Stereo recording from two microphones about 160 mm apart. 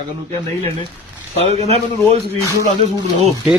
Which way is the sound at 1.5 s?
40° right (ahead or behind).